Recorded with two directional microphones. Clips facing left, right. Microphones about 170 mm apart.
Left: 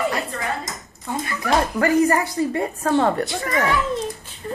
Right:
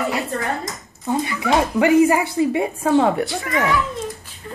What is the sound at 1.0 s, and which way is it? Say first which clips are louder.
Speech: right 5 dB; 20° right (ahead or behind).